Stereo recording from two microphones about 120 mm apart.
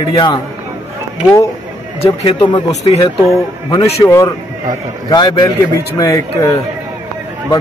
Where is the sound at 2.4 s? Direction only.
40° left (ahead or behind).